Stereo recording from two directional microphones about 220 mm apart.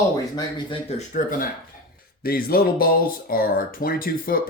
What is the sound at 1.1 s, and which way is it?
Speech, 40° left (ahead or behind).